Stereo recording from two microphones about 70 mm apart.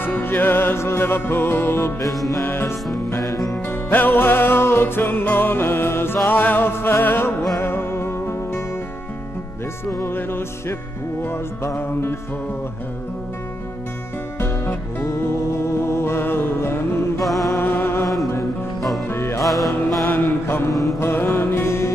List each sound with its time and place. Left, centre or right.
0.0 s music: left
3.2 s music: left
3.6 s music: left
9.8 s music: left
10.1 s music: left
14.4 s music: left
17.2 s music: centre
17.6 s music: left
18.0 s music: centre
19.0 s music: left
19.4 s music: centre
20.1 s mantra: left
21.0 s music: left